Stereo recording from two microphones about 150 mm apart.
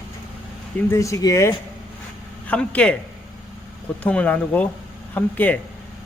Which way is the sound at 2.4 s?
10° left (ahead or behind).